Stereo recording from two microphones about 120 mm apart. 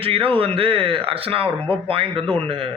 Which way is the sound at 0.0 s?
50° right (ahead or behind).